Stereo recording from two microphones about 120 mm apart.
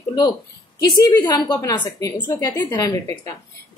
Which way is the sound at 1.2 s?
35° left (ahead or behind).